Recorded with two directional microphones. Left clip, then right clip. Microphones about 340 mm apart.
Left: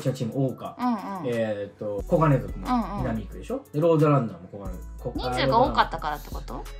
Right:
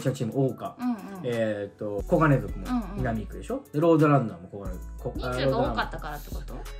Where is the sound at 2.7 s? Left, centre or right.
Centre.